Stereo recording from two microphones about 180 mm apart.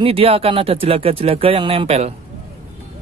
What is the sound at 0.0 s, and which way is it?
Speech, 30° right (ahead or behind).